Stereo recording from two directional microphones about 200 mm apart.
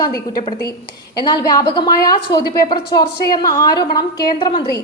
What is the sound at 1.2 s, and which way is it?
A woman's voice, 20° left (ahead or behind).